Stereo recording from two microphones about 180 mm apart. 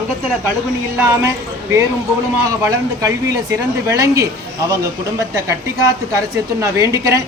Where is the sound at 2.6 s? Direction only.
20° right (ahead or behind).